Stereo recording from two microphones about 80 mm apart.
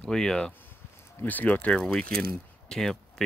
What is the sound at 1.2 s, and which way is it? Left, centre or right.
Speech, left.